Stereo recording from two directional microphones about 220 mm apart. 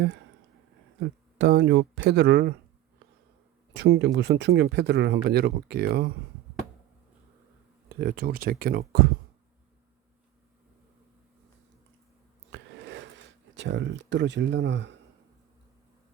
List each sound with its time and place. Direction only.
0.9 s speech: 55° right (ahead or behind)
3.8 s speech: 50° right (ahead or behind)
7.9 s speech: 45° right (ahead or behind)
12.5 s a sound: 55° right (ahead or behind)